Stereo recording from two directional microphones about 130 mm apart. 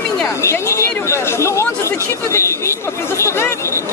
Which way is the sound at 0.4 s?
20° left (ahead or behind).